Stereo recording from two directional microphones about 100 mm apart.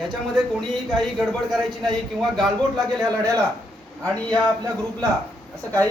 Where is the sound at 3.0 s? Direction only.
35° right (ahead or behind).